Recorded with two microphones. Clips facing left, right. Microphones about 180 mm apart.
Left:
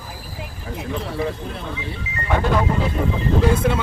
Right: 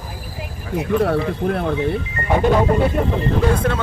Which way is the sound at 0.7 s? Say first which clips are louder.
Right 9 dB; 60° right (ahead or behind).